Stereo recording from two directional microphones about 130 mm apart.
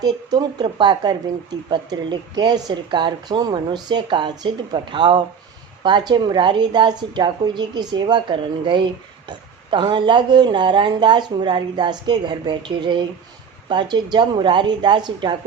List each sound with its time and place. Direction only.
0.0 s a woman's voice: 30° right (ahead or behind)